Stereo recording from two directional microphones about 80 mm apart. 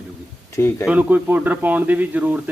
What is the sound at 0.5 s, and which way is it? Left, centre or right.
Speech, left.